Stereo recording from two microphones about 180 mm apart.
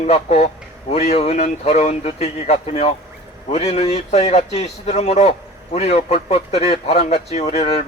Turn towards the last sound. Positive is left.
turn(degrees=35)  # may be behind; listen again after turning